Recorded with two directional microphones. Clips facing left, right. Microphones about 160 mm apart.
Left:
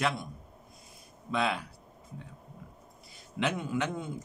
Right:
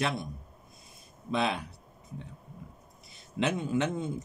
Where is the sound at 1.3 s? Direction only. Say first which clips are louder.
Right 1 dB; 20° right (ahead or behind).